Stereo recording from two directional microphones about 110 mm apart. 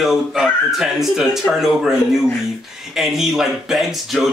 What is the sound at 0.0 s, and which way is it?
Speech, 5° right (ahead or behind).